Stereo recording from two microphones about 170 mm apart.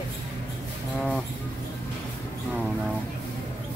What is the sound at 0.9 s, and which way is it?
Speech, 5° left (ahead or behind).